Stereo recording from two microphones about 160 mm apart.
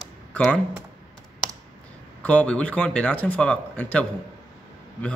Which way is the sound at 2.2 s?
10° left (ahead or behind).